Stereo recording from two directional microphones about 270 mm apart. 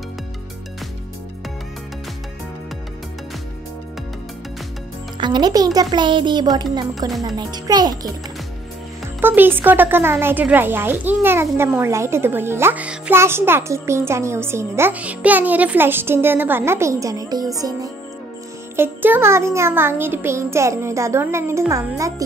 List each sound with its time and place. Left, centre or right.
5.1 s speech: centre
7.1 s speech: centre
7.3 s speech: centre
9.2 s speech: centre
18.8 s speech: centre